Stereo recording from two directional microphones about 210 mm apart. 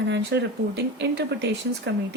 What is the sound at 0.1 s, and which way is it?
Speech, 55° right (ahead or behind).